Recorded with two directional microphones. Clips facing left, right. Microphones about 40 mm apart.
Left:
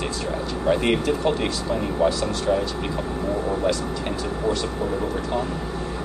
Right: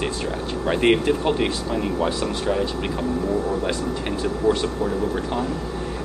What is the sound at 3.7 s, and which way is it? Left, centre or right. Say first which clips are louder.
Speech: even; right.